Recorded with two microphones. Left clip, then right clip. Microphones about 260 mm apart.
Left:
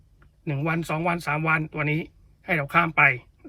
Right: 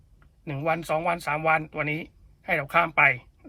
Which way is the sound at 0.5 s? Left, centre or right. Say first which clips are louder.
Right 2 dB; right.